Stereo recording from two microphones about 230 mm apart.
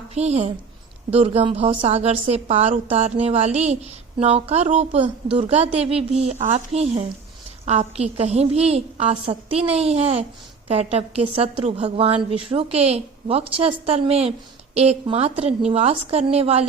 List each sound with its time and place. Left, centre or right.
0.1 s a woman's voice: right